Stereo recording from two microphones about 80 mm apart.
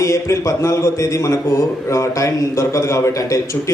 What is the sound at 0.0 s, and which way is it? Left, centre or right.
A man's voice, left.